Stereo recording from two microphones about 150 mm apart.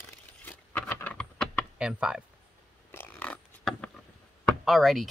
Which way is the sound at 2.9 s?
10° left (ahead or behind).